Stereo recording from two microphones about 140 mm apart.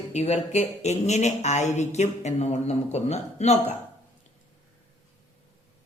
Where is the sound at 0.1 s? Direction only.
55° left (ahead or behind).